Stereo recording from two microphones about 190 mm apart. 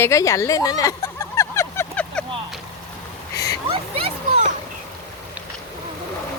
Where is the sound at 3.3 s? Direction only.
20° left (ahead or behind).